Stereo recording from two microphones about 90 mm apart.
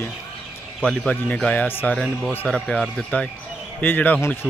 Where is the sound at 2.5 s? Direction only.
5° left (ahead or behind).